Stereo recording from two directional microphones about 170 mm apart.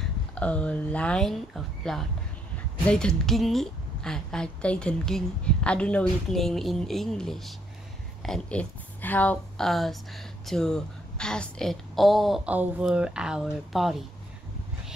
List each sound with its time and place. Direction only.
0.0 s a woman's voice: 5° left (ahead or behind)